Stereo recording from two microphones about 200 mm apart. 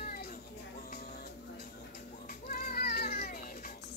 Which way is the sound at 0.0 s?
50° left (ahead or behind).